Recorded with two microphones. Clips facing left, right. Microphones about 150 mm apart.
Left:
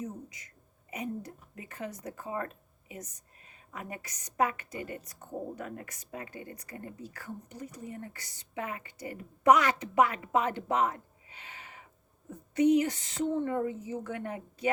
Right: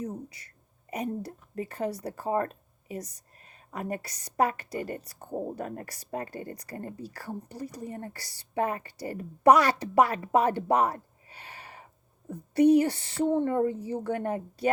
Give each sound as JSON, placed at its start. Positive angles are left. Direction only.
{"t": 0.0, "sound": "a woman's voice", "side_deg": -35}
{"t": 3.7, "sound": "a woman's voice", "side_deg": -40}